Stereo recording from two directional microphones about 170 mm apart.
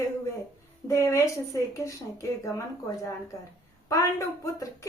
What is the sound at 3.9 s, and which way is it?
Speech, 20° left (ahead or behind).